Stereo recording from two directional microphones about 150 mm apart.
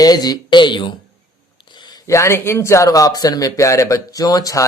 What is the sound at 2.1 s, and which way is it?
Speech, 20° left (ahead or behind).